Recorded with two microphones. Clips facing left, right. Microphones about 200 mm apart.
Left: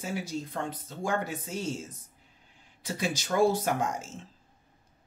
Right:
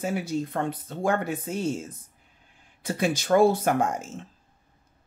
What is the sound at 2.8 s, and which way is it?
Speech, 55° right (ahead or behind).